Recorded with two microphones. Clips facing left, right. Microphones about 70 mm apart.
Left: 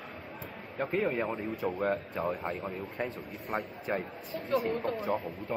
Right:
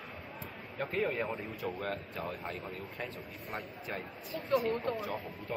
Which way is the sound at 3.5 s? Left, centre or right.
Left.